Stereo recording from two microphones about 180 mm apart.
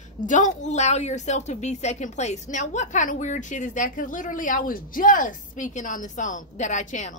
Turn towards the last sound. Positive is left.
turn(degrees=40)  # may be behind; listen again after turning